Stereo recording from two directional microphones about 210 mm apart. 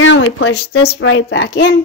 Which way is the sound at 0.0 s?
60° left (ahead or behind).